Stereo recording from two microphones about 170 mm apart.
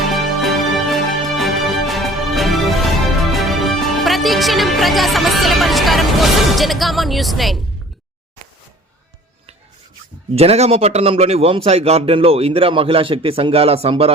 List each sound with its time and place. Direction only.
0.1 s music: centre (ahead or behind)
3.3 s speech: centre (ahead or behind)
10.3 s a man's voice: 35° right (ahead or behind)